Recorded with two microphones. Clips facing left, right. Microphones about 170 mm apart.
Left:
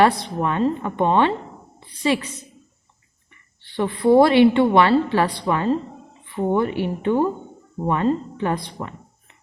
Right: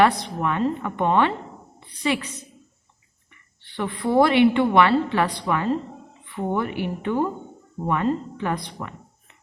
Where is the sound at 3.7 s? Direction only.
25° left (ahead or behind).